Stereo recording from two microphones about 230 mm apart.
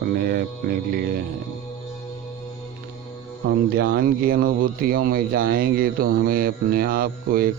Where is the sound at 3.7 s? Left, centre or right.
Right.